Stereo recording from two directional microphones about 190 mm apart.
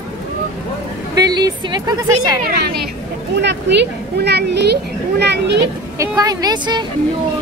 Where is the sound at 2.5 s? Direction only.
55° right (ahead or behind).